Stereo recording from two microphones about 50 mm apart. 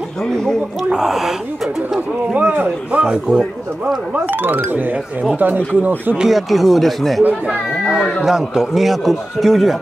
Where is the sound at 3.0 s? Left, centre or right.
Centre.